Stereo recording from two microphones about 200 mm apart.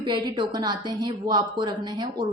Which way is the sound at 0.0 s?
25° right (ahead or behind).